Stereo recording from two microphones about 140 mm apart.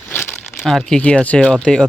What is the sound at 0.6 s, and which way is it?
Speech, 5° left (ahead or behind).